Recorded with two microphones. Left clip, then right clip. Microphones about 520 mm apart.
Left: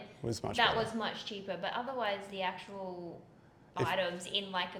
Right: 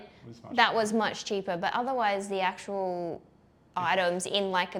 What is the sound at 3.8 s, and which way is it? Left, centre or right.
Speech, right.